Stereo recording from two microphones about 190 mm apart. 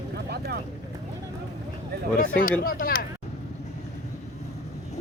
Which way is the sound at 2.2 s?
45° left (ahead or behind).